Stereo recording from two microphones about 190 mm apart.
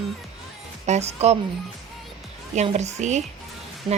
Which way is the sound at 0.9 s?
35° right (ahead or behind).